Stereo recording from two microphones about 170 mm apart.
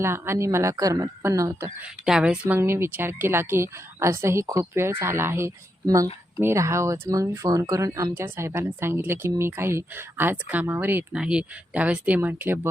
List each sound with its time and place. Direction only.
0.0 s speech: 15° right (ahead or behind)
2.0 s speech: 5° right (ahead or behind)